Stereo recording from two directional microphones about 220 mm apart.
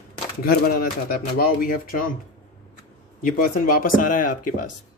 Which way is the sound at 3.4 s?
40° left (ahead or behind).